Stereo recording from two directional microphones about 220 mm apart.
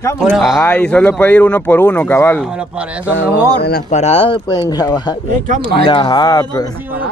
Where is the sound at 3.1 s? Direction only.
45° left (ahead or behind).